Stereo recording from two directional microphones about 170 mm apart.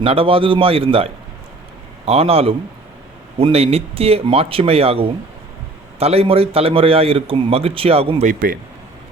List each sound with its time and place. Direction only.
0.0 s a man's voice: 35° right (ahead or behind)
8.3 s speech: 55° right (ahead or behind)